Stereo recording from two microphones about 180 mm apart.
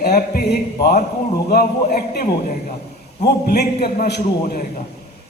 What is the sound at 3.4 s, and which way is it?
A man's voice, 65° left (ahead or behind).